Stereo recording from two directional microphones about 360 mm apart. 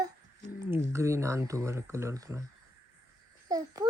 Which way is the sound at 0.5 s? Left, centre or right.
Centre.